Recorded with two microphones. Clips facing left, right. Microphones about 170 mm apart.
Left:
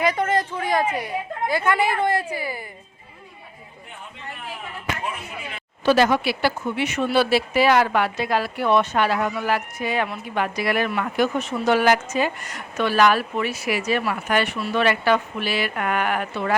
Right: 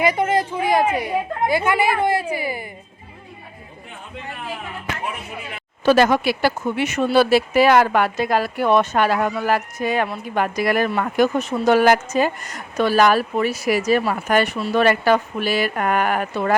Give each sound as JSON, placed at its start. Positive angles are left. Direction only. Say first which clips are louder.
{"t": 0.0, "sound": "a woman's voice", "louder": "right 3 dB", "side_deg": -10}
{"t": 5.8, "sound": "speech", "louder": "right 3 dB", "side_deg": -45}